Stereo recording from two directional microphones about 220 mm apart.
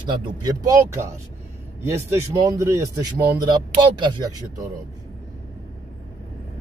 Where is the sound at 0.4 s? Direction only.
15° right (ahead or behind).